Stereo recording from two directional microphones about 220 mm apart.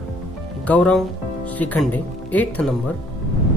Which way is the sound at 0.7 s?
5° left (ahead or behind).